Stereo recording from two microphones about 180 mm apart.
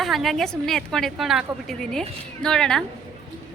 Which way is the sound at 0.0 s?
Centre (ahead or behind).